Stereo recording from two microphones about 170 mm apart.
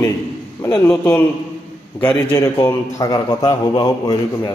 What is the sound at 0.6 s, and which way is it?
Speech, 25° left (ahead or behind).